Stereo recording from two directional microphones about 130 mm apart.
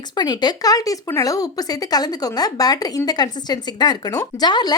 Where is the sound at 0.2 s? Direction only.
30° left (ahead or behind).